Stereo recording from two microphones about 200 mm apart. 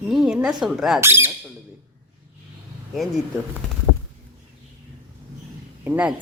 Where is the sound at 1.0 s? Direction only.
10° right (ahead or behind).